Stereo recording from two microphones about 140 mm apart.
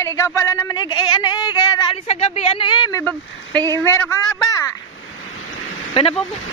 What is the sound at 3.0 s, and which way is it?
Speech, 10° left (ahead or behind).